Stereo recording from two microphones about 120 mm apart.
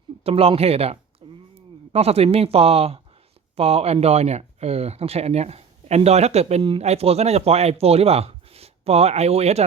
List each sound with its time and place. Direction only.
0.3 s speech: 55° right (ahead or behind)
1.2 s chop: 45° right (ahead or behind)
1.9 s speech: 60° right (ahead or behind)
6.6 s speech: 45° right (ahead or behind)
6.8 s speech: 60° right (ahead or behind)